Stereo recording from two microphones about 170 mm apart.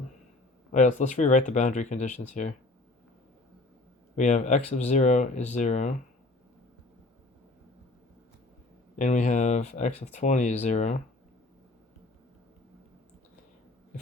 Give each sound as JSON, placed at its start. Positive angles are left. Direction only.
{"t": 0.7, "sound": "speech", "side_deg": 45}
{"t": 4.1, "sound": "speech", "side_deg": 45}
{"t": 9.0, "sound": "speech", "side_deg": 45}